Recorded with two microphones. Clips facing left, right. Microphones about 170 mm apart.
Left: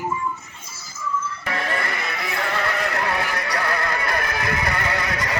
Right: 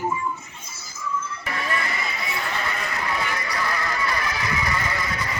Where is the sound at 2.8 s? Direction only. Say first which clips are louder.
Left 4 dB; 65° left (ahead or behind).